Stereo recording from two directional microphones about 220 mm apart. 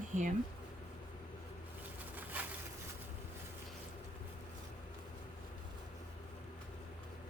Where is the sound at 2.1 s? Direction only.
10° right (ahead or behind).